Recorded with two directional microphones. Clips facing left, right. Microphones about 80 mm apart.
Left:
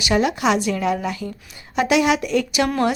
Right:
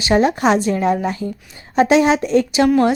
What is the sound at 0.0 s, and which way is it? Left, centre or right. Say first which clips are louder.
A woman's voice: right 4 dB; right.